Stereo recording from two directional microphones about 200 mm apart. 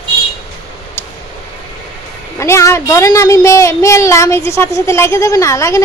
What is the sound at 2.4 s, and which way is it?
Speech, 15° left (ahead or behind).